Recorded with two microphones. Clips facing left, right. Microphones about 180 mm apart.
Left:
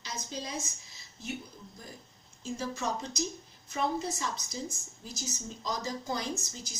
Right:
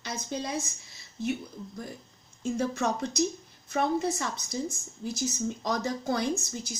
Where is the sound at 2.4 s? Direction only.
60° right (ahead or behind).